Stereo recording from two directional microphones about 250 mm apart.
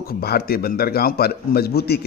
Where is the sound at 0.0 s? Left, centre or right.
Left.